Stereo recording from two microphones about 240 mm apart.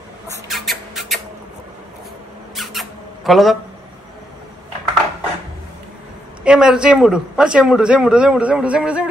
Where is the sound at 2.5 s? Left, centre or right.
Centre.